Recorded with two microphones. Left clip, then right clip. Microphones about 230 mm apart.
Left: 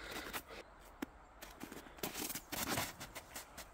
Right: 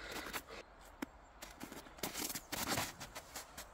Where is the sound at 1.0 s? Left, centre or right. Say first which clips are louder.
Even; centre.